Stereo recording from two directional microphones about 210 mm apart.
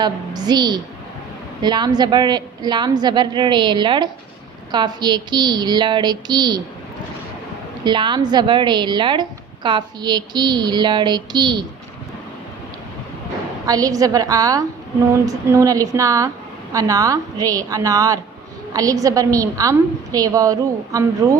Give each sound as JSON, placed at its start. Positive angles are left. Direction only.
{"t": 0.0, "sound": "a woman's voice", "side_deg": -20}
{"t": 7.9, "sound": "a woman's voice", "side_deg": -20}
{"t": 13.7, "sound": "a woman's voice", "side_deg": -15}